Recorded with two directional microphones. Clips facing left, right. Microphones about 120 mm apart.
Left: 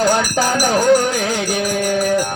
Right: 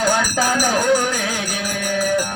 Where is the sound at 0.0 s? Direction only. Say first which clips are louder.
Left 3 dB; 25° left (ahead or behind).